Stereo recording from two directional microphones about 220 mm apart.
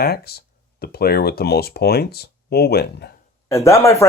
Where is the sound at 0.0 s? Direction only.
45° left (ahead or behind).